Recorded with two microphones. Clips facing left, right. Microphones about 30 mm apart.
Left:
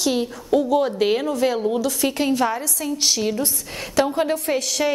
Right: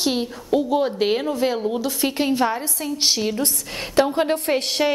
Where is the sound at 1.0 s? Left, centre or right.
Centre.